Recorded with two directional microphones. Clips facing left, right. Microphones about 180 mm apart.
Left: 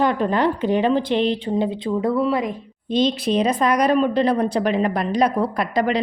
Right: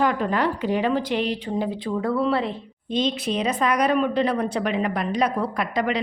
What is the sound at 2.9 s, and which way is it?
A woman's voice, 35° left (ahead or behind).